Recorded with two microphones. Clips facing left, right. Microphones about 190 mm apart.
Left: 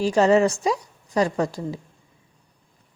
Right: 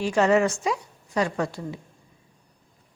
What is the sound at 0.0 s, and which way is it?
A woman's voice, 35° left (ahead or behind).